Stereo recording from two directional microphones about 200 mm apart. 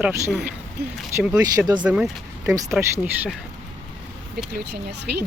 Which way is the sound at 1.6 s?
20° right (ahead or behind).